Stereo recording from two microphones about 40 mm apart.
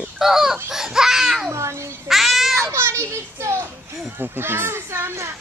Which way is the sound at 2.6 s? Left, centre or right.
Right.